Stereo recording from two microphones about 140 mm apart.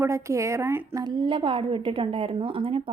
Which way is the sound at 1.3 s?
40° right (ahead or behind).